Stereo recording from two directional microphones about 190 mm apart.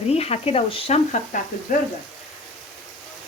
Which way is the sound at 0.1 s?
35° left (ahead or behind).